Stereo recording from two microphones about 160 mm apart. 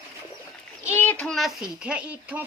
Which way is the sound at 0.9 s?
10° left (ahead or behind).